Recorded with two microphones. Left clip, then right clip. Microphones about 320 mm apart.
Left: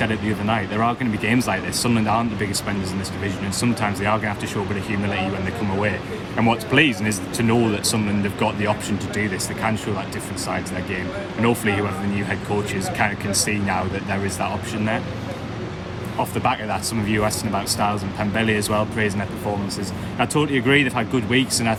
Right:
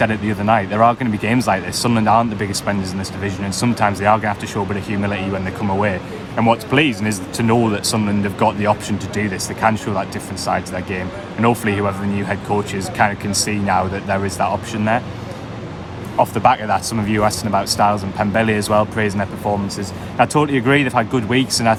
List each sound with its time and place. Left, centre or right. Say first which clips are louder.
0.0 s speech: right 5 dB; centre
5.8 s speech: right 3 dB; centre
16.3 s speech: right 6 dB; centre